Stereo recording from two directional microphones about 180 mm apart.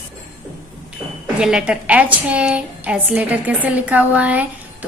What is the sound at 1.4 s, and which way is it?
A woman's voice, 5° right (ahead or behind).